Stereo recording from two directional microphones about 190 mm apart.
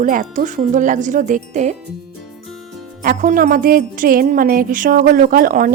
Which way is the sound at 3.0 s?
45° right (ahead or behind).